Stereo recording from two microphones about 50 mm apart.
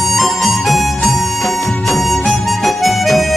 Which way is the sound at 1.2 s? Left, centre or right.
Left.